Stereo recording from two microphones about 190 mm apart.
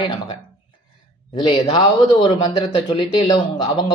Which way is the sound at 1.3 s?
30° left (ahead or behind).